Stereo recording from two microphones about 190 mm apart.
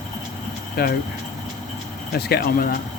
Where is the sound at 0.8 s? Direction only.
55° left (ahead or behind).